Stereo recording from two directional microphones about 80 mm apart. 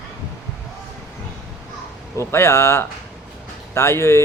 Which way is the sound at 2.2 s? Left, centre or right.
Left.